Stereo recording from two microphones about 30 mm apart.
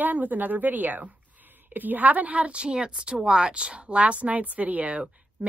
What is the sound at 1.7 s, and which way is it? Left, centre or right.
Speech, right.